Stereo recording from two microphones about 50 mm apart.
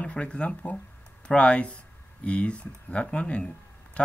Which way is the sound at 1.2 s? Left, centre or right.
Centre.